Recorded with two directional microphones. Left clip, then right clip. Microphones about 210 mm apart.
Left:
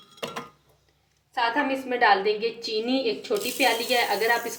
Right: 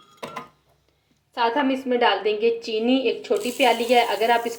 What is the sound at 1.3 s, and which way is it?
A woman's voice, 25° right (ahead or behind).